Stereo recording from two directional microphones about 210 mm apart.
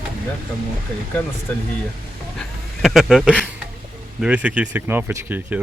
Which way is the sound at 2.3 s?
Centre (ahead or behind).